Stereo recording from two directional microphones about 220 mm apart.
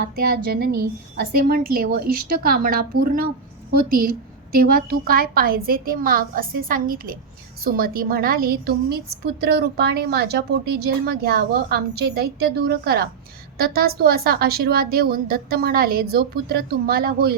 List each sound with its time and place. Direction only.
0.0 s a woman's voice: 45° right (ahead or behind)